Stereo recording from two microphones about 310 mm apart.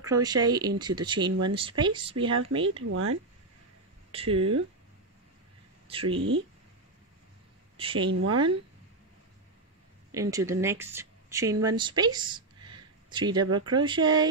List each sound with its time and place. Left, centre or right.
0.0 s speech: centre
2.9 s speech: right
4.1 s speech: centre
5.9 s speech: centre
7.7 s speech: centre
10.1 s speech: centre